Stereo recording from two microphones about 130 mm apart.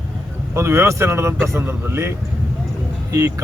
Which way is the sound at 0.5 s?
20° right (ahead or behind).